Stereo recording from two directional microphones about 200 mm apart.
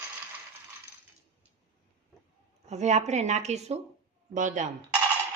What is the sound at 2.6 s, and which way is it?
Speech, 35° right (ahead or behind).